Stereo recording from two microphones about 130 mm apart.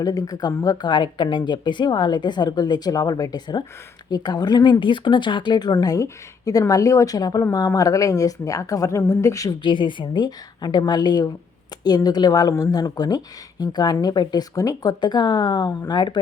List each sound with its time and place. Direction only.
0.0 s a woman's voice: 30° left (ahead or behind)
9.6 s speech: 40° left (ahead or behind)